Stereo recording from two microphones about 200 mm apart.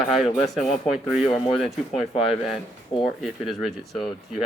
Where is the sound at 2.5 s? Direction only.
25° left (ahead or behind).